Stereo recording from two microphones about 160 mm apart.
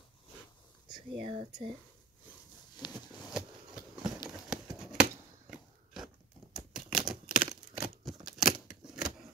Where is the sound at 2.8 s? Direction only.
25° left (ahead or behind).